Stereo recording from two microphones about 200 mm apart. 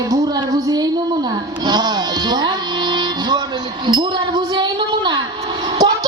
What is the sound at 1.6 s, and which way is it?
Music, 20° right (ahead or behind).